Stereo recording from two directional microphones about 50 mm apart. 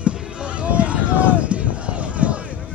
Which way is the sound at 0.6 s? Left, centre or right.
Right.